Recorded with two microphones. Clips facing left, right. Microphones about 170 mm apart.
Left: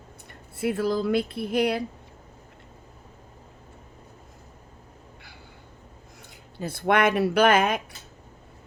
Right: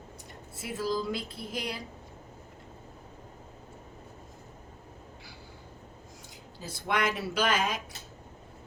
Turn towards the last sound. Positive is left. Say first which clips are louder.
# left 9 dB
turn(degrees=60)  # may be behind; listen again after turning